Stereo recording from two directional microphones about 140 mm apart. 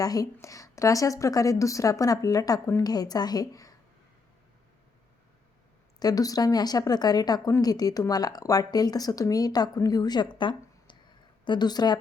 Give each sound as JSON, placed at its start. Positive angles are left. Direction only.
{"t": 0.0, "sound": "speech", "side_deg": 25}
{"t": 6.0, "sound": "a woman's voice", "side_deg": 25}